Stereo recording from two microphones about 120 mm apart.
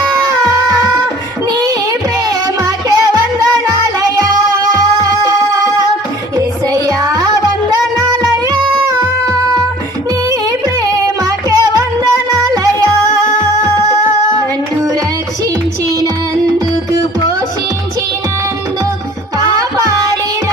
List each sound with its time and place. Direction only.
0.4 s music: 30° right (ahead or behind)
1.5 s child singing: 30° right (ahead or behind)
2.6 s music: 30° right (ahead or behind)
10.8 s music: 30° right (ahead or behind)